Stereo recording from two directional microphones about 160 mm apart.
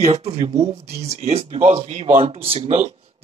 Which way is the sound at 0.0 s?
40° right (ahead or behind).